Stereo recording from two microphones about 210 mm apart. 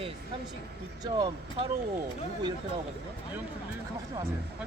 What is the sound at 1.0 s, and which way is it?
Speech, 20° right (ahead or behind).